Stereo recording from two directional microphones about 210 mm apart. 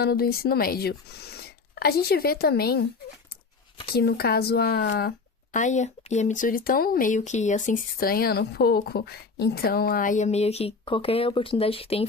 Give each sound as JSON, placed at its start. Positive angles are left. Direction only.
{"t": 0.0, "sound": "speech", "side_deg": 50}
{"t": 3.8, "sound": "speech", "side_deg": 50}